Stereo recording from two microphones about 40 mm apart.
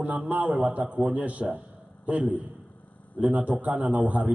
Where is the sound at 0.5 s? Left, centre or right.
Right.